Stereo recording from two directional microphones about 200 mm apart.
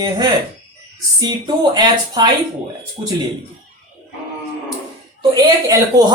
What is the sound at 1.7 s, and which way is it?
Speech, 20° right (ahead or behind).